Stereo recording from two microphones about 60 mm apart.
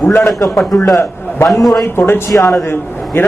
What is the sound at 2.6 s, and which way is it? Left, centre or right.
Speech, left.